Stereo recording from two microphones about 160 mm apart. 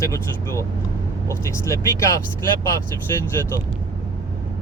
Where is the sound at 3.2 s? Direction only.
15° left (ahead or behind).